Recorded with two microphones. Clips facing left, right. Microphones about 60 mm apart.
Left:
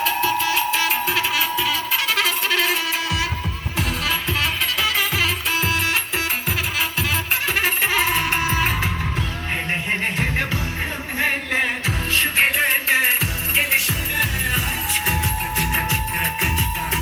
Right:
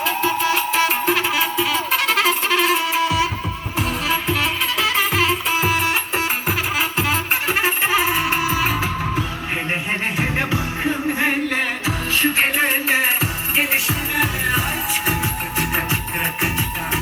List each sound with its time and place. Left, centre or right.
0.0 s music: right; by 9.2 s centre
10.2 s music: centre
11.3 s music: centre
13.7 s music: centre